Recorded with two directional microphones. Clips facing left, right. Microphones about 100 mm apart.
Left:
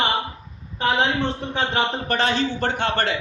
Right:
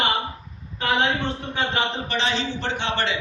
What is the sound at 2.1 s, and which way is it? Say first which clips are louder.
A man's voice: left 4 dB; 50° left (ahead or behind).